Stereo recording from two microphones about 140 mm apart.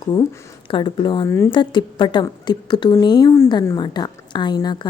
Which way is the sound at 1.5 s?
35° left (ahead or behind).